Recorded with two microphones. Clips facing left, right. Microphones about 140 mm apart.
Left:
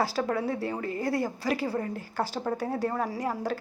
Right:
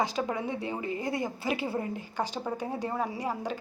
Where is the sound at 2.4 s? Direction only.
15° right (ahead or behind).